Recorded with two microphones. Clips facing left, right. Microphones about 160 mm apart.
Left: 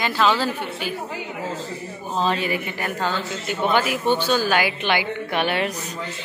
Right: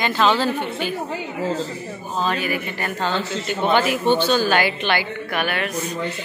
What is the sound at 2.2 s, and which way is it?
Speech, 25° left (ahead or behind).